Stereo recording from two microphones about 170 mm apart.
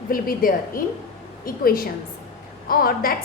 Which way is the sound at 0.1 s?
55° left (ahead or behind).